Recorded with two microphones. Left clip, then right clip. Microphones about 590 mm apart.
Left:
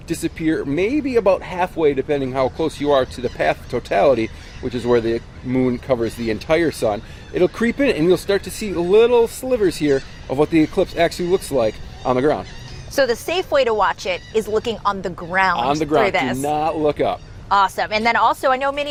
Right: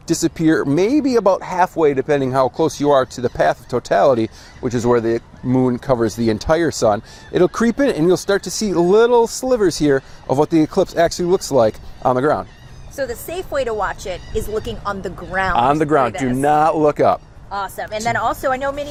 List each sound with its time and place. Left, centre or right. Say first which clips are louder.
0.1 s speech: right 5 dB; right
13.0 s speech: left 6 dB; left
15.5 s speech: right 3 dB; right
17.5 s speech: left 7 dB; left